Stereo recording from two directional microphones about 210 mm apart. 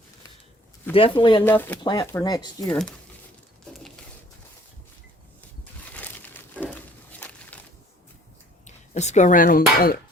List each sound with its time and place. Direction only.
0.9 s speech: 25° left (ahead or behind)
1.5 s speech: 10° left (ahead or behind)
2.6 s speech: 5° left (ahead or behind)
3.7 s pigeon: centre (ahead or behind)
5.9 s crumpling: 10° left (ahead or behind)
6.7 s a sound: 5° left (ahead or behind)
8.6 s speech: 35° left (ahead or behind)